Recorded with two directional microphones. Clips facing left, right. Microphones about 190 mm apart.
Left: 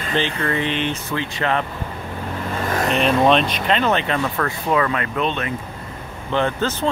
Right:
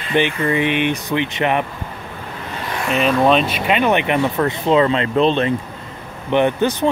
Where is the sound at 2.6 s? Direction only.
40° left (ahead or behind).